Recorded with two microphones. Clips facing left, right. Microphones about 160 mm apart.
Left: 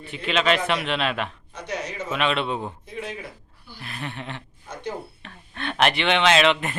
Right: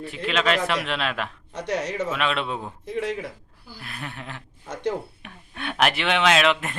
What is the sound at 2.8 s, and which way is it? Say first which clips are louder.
Speech: right 6 dB; 75° right (ahead or behind).